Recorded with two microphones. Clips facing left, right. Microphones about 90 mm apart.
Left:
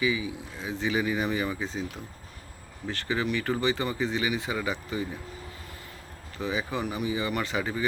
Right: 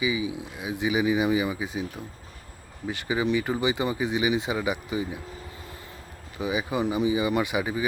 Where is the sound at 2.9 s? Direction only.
15° right (ahead or behind).